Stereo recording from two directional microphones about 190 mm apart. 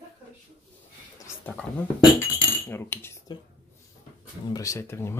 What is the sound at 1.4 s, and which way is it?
A woman's voice, 5° left (ahead or behind).